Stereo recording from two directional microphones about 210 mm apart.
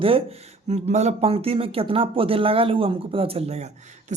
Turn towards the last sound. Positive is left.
turn(degrees=-35)  # may be behind; listen again after turning